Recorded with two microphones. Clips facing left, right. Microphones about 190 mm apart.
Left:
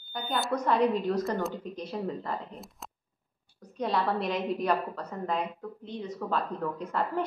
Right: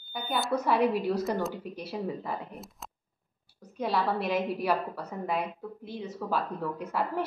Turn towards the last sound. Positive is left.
turn(degrees=-5)  # may be behind; listen again after turning